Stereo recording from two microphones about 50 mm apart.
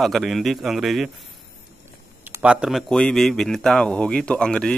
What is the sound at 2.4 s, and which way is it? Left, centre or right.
Speech, right.